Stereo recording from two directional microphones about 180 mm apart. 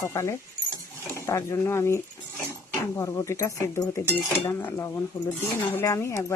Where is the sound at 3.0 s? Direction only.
15° left (ahead or behind).